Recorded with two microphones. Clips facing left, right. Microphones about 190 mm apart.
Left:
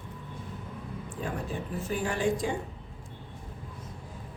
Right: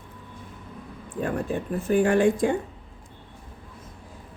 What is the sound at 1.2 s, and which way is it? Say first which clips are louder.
Speech: right 8 dB; 60° right (ahead or behind).